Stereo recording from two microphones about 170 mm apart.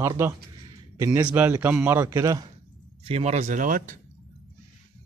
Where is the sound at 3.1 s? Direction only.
40° right (ahead or behind).